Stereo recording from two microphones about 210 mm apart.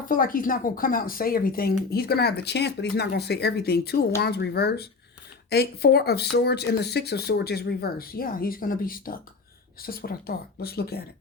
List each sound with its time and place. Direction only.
0.0 s speech: 40° left (ahead or behind)